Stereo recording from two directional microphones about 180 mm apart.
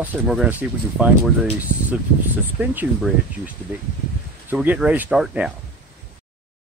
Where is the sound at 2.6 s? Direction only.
10° right (ahead or behind).